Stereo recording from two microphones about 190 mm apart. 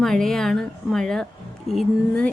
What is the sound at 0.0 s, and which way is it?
A woman's voice, centre (ahead or behind).